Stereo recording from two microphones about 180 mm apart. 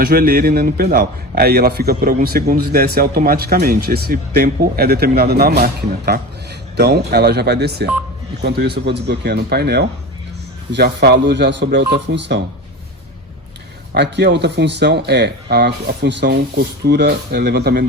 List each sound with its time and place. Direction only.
0.0 s a man's voice: 55° right (ahead or behind)
13.9 s speech: 70° right (ahead or behind)